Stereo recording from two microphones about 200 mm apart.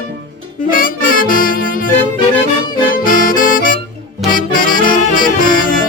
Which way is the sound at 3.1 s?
45° left (ahead or behind).